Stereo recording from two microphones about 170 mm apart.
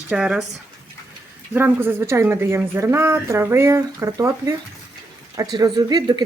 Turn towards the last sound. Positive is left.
turn(degrees=-25)  # may be behind; listen again after turning